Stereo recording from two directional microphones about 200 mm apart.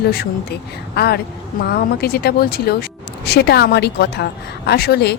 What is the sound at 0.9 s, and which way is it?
A woman's voice, 55° left (ahead or behind).